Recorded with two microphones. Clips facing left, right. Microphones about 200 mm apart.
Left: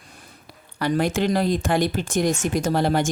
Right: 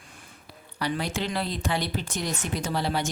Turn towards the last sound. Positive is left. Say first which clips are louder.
# left 7 dB
turn(degrees=50)  # may be behind; listen again after turning